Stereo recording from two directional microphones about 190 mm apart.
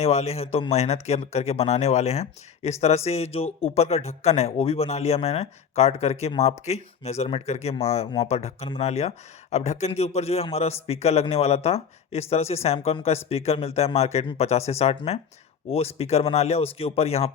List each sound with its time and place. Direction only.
0.0 s speech: 35° left (ahead or behind)